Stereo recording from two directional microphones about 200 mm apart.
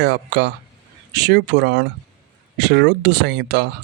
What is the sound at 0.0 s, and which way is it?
Speech, 60° right (ahead or behind).